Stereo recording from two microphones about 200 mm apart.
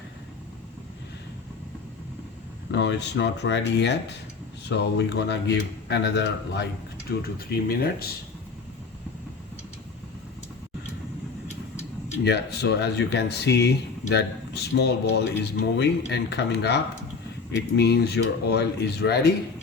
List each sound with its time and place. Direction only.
2.7 s speech: 60° left (ahead or behind)
12.2 s speech: 55° left (ahead or behind)